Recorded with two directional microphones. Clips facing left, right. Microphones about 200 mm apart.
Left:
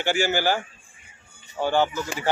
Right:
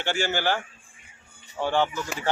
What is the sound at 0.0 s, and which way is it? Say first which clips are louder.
Speech: left 3 dB; 10° left (ahead or behind).